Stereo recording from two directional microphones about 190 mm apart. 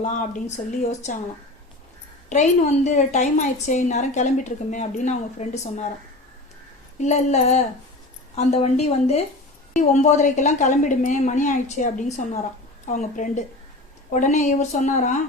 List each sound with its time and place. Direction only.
0.0 s a woman's voice: 40° left (ahead or behind)
2.3 s a woman's voice: 35° left (ahead or behind)
7.0 s a woman's voice: 35° left (ahead or behind)